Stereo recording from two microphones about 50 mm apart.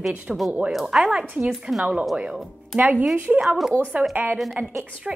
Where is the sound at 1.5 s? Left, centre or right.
Centre.